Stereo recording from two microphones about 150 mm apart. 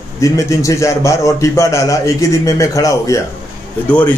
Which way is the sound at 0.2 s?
20° left (ahead or behind).